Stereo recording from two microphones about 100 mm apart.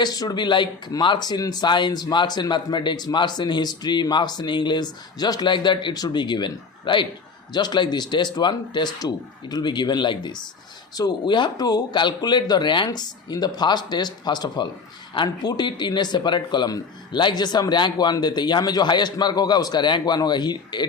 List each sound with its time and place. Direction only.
0.0 s speech: 40° left (ahead or behind)